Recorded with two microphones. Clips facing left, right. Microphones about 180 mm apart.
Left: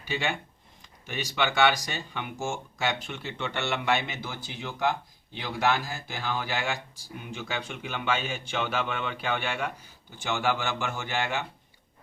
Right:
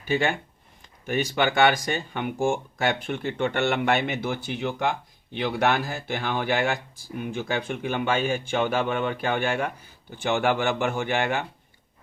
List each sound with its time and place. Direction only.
0.0 s a man's voice: 50° right (ahead or behind)